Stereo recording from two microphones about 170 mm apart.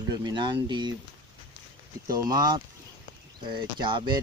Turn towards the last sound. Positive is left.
turn(degrees=-30)  # may be behind; listen again after turning